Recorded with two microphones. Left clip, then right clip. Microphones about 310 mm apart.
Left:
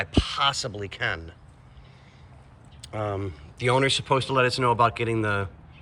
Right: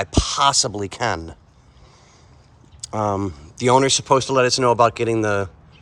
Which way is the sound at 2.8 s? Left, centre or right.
Right.